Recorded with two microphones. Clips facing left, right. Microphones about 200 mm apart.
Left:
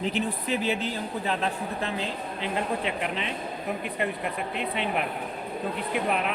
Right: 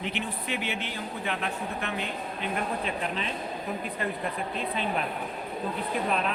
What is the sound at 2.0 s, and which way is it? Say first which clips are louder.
Speech: left 2 dB; 90° left.